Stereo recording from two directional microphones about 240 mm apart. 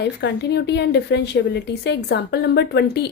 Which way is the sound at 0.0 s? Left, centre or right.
Left.